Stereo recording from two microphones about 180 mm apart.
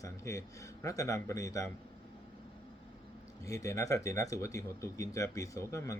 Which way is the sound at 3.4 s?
15° left (ahead or behind).